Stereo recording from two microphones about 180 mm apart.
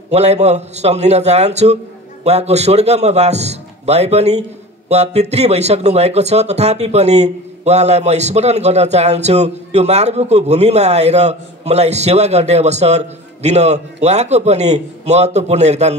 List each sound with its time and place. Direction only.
0.1 s speech: 35° right (ahead or behind)